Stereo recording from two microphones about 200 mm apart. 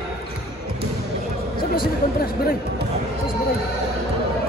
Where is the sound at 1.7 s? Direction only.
50° left (ahead or behind).